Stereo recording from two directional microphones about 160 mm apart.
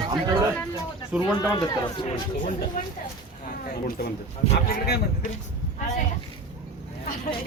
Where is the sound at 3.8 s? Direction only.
65° left (ahead or behind).